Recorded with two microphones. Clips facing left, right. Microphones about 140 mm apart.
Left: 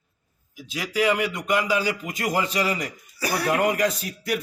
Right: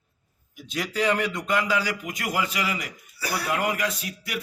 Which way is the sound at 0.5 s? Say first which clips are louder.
Left 2 dB; centre (ahead or behind).